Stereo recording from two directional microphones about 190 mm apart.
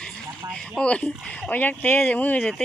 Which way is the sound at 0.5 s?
5° left (ahead or behind).